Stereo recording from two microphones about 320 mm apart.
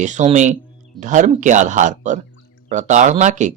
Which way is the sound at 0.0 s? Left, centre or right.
Right.